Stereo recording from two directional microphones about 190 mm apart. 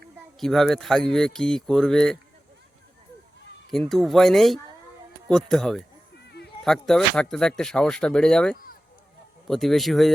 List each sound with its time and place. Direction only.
0.3 s speech: centre (ahead or behind)
3.7 s speech: centre (ahead or behind)
6.2 s a sound: 60° left (ahead or behind)
6.7 s speech: 5° left (ahead or behind)